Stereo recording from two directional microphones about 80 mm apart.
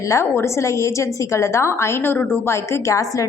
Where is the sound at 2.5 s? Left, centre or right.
Left.